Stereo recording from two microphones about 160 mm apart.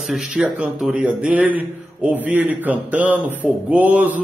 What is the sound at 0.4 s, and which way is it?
A man's voice, 5° right (ahead or behind).